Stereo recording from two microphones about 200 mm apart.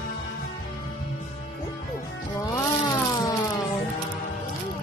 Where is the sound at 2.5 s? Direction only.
15° left (ahead or behind).